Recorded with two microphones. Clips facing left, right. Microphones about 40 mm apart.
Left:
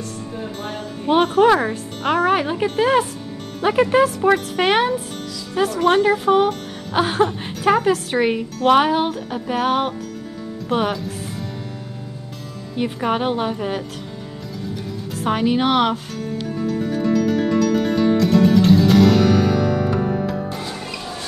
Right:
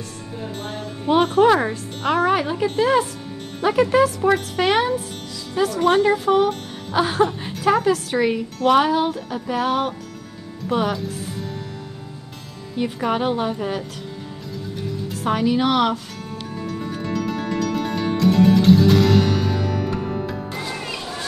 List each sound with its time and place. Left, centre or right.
1.2 s speech: centre; by 4.9 s left
5.9 s speech: centre
6.1 s speech: left
12.7 s speech: centre
15.2 s speech: left
16.5 s music: centre